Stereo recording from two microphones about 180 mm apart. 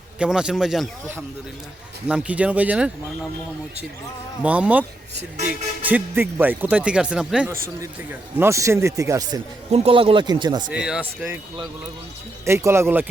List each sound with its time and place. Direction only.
0.2 s speech: 5° right (ahead or behind)
4.4 s speech: 5° right (ahead or behind)
9.7 s speech: 30° right (ahead or behind)
10.7 s speech: 5° right (ahead or behind)
12.5 s speech: 15° right (ahead or behind)